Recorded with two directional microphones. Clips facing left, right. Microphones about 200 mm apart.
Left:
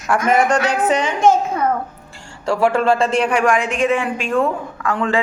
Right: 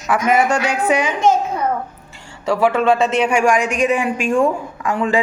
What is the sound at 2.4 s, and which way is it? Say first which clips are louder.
A woman's voice: right 1 dB; 5° right (ahead or behind).